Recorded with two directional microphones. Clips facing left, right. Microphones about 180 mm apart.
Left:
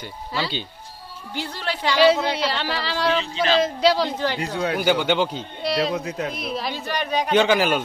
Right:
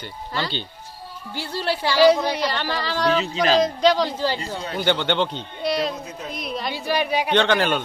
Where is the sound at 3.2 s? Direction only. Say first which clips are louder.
Right 2 dB; 40° right (ahead or behind).